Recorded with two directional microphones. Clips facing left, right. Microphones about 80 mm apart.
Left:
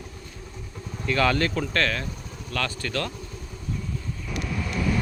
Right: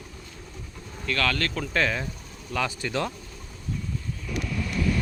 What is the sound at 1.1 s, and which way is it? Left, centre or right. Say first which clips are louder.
Speech: left 4 dB; centre.